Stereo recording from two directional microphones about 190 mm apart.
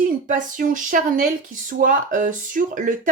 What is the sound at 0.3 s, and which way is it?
Speech, 40° right (ahead or behind).